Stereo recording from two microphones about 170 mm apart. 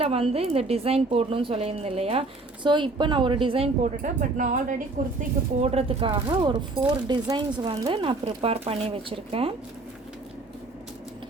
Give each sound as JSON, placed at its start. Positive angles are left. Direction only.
{"t": 0.0, "sound": "speech", "side_deg": -35}
{"t": 4.0, "sound": "speech", "side_deg": -50}
{"t": 5.6, "sound": "speech", "side_deg": -35}